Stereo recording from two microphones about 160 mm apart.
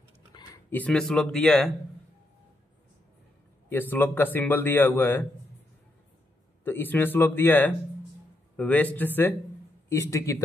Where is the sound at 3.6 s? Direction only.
10° left (ahead or behind).